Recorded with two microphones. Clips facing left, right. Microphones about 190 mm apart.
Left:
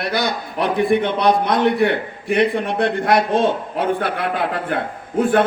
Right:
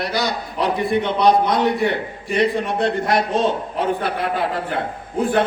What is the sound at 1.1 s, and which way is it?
A man's voice, 55° left (ahead or behind).